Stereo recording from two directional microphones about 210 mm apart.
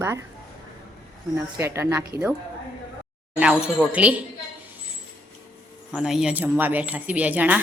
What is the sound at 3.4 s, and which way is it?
Speech, 5° right (ahead or behind).